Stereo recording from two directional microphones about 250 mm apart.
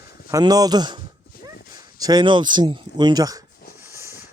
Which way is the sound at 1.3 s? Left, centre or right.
Left.